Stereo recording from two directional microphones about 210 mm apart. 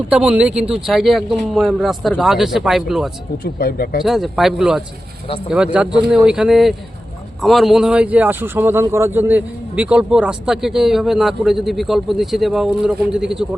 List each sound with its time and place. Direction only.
0.1 s speech: 5° right (ahead or behind)
3.3 s speech: 45° left (ahead or behind)
4.0 s speech: centre (ahead or behind)